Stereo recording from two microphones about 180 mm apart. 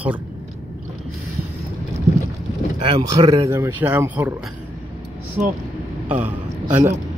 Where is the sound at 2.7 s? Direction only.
25° right (ahead or behind); by 4.3 s 10° right (ahead or behind).